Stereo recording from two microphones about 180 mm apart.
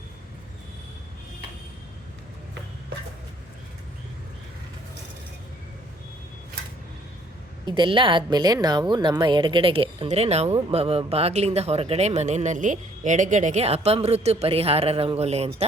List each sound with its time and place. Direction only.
7.6 s a woman's voice: 25° right (ahead or behind)